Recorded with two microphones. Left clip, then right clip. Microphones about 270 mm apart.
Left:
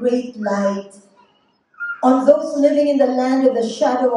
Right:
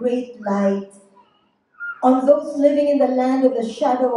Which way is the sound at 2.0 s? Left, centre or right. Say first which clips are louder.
Left 2 dB; left.